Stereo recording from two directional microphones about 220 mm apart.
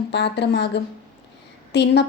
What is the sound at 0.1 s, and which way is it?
A woman's voice, 50° left (ahead or behind).